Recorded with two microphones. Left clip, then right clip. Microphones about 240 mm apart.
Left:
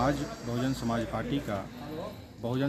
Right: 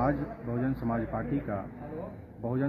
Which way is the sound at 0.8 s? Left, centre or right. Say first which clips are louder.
Left 1 dB; centre.